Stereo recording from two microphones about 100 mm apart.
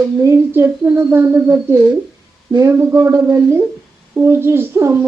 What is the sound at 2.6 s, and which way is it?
Speech, 25° right (ahead or behind).